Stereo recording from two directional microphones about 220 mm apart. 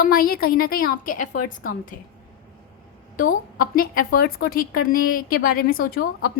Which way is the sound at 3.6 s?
40° left (ahead or behind).